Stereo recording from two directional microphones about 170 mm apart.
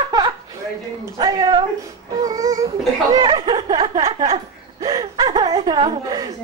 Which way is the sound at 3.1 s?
25° right (ahead or behind).